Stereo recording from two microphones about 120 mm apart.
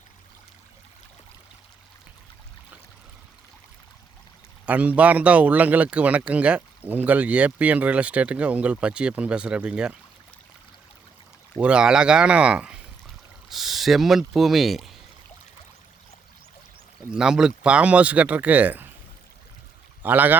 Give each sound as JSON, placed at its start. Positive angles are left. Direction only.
{"t": 4.6, "sound": "a man's voice", "side_deg": -10}
{"t": 11.6, "sound": "a man's voice", "side_deg": -10}
{"t": 17.1, "sound": "a man's voice", "side_deg": -5}
{"t": 20.0, "sound": "speech", "side_deg": -15}